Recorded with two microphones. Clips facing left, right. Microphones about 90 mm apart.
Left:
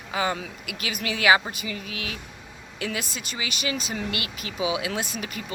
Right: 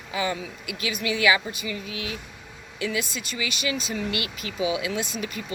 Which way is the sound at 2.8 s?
45° left (ahead or behind).